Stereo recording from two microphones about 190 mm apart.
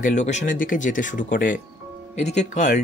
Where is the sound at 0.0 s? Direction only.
40° left (ahead or behind).